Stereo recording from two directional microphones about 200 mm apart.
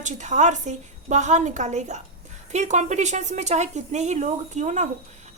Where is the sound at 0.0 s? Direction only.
35° right (ahead or behind).